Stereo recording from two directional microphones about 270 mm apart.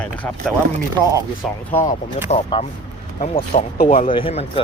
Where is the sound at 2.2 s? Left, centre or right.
Left.